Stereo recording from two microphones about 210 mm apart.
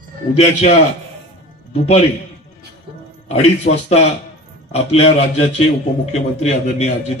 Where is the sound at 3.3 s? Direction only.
30° left (ahead or behind).